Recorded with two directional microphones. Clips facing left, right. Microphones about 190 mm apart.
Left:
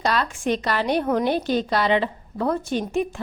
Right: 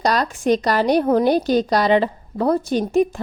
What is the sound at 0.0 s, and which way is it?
A woman's voice, 40° right (ahead or behind).